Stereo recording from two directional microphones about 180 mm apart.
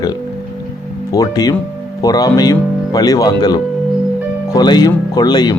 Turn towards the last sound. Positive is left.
turn(degrees=20)  # may be behind; listen again after turning